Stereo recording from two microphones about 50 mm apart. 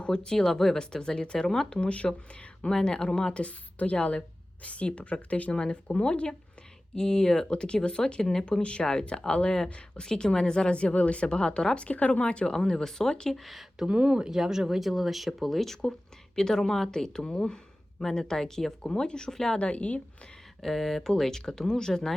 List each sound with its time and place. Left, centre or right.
0.0 s a woman's voice: centre
13.3 s speech: centre
13.8 s speech: centre
19.5 s a woman's voice: left
20.6 s speech: centre